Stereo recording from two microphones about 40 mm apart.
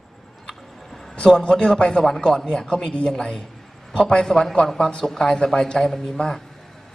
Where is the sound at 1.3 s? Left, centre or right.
Centre.